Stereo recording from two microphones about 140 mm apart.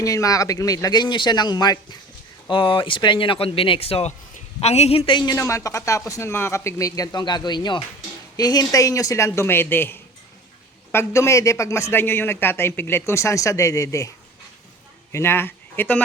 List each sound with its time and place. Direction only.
0.0 s a woman's voice: 25° left (ahead or behind)
15.1 s speech: 15° left (ahead or behind)